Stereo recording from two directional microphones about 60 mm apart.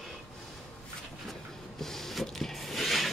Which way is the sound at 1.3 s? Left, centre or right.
Centre.